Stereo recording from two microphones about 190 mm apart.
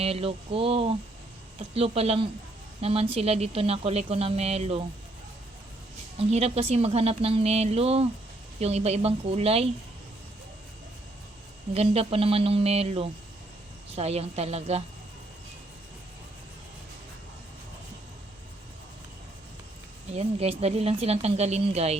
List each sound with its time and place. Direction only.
0.0 s speech: 30° right (ahead or behind)
6.1 s speech: 35° right (ahead or behind)
11.7 s speech: 30° right (ahead or behind)
20.1 s speech: 35° right (ahead or behind)